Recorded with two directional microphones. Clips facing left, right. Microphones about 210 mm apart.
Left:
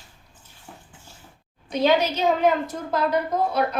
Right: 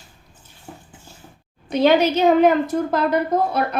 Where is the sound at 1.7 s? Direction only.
60° right (ahead or behind).